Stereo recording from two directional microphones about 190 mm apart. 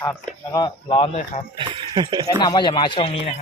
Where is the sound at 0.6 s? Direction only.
25° left (ahead or behind).